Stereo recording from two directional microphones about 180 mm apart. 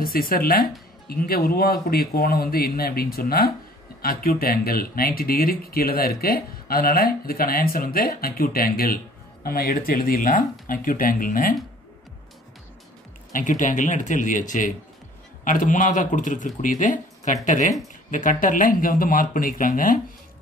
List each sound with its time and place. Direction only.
0.0 s speech: 55° left (ahead or behind)
13.3 s speech: 45° left (ahead or behind)